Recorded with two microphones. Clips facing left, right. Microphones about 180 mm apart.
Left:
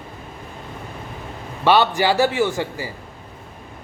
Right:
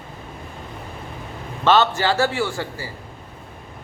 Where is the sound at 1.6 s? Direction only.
15° left (ahead or behind).